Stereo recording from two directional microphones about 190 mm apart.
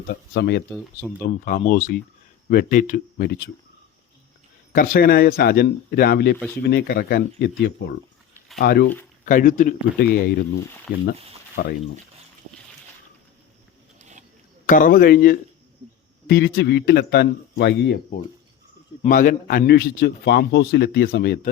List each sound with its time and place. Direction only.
0.1 s a man's voice: 60° left (ahead or behind)
1.2 s speech: 45° left (ahead or behind); by 3.5 s 60° left (ahead or behind)
4.7 s a man's voice: 50° left (ahead or behind)
9.2 s speech: 45° left (ahead or behind)
11.5 s a man's voice: 55° left (ahead or behind)
14.7 s a man's voice: 45° left (ahead or behind)
19.0 s a man's voice: 45° left (ahead or behind)